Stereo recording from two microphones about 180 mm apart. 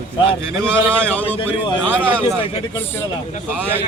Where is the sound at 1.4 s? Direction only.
25° left (ahead or behind).